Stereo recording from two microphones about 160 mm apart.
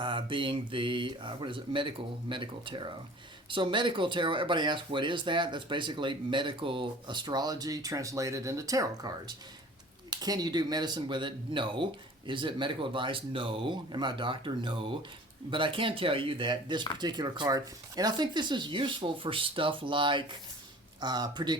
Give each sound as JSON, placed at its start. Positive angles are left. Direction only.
{"t": 0.0, "sound": "speech", "side_deg": -30}